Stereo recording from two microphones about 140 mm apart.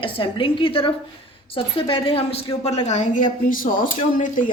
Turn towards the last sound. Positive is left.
turn(degrees=70)  # may be behind; listen again after turning